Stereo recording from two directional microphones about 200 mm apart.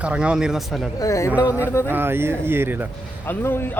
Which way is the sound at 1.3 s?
5° right (ahead or behind).